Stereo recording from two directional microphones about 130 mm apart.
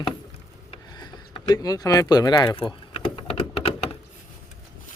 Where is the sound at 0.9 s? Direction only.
35° left (ahead or behind).